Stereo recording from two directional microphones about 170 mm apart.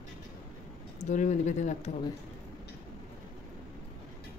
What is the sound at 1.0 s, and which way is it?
Speech, 45° left (ahead or behind).